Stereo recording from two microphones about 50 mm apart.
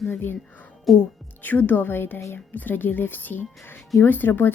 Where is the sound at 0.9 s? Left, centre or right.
Centre.